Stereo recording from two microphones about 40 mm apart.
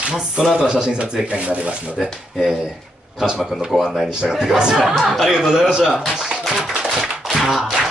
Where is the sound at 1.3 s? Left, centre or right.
Right.